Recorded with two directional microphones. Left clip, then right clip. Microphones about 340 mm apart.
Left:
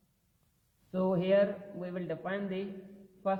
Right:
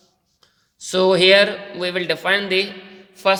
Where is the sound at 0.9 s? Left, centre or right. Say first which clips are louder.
Right 15 dB; right.